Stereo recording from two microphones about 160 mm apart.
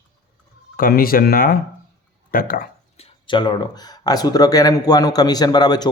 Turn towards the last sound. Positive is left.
turn(degrees=25)  # may be behind; listen again after turning